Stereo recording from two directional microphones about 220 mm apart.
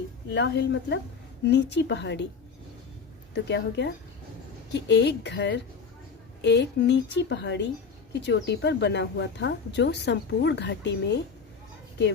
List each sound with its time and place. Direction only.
0.3 s speech: 55° left (ahead or behind)
3.3 s speech: 50° left (ahead or behind)